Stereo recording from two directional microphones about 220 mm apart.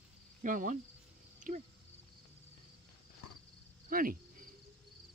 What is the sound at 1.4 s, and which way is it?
Cricket, 35° right (ahead or behind).